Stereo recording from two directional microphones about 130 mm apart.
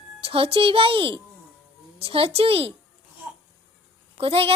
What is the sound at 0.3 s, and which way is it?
A woman's voice, 45° right (ahead or behind).